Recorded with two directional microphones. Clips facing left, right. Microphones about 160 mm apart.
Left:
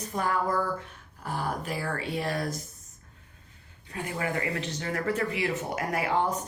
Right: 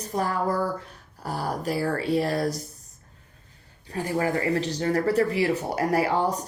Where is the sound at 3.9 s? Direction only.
35° right (ahead or behind).